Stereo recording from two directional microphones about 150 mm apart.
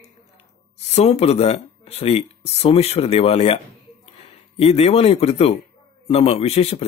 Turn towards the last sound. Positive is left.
turn(degrees=45)  # may be behind; listen again after turning